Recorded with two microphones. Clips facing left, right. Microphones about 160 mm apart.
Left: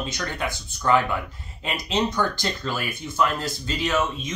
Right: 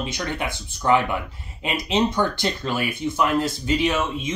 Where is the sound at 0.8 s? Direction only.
20° right (ahead or behind).